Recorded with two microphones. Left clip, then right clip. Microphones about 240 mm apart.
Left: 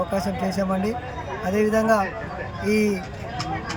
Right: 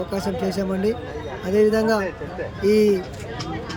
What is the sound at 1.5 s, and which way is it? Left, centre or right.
Speech, centre.